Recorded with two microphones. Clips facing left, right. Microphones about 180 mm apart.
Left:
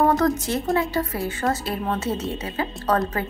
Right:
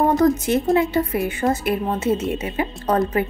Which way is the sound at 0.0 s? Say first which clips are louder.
Right 3 dB; 20° right (ahead or behind).